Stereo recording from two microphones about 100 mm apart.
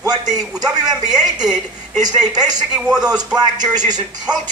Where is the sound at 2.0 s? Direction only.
40° right (ahead or behind).